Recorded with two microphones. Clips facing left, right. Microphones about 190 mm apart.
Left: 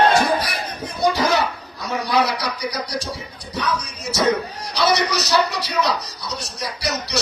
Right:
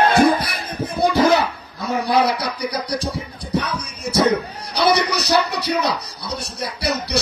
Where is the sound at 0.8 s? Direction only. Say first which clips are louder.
Right 4 dB; 55° right (ahead or behind).